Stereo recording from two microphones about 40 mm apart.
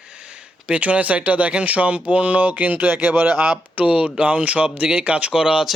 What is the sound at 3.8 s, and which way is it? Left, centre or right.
Speech, right.